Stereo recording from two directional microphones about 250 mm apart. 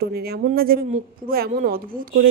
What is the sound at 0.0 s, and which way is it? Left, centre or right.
Speech, right.